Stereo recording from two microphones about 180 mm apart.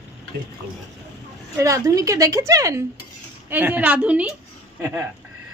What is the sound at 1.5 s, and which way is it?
A woman's voice, 15° right (ahead or behind).